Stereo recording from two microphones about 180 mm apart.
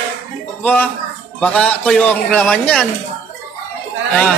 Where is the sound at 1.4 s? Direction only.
5° left (ahead or behind).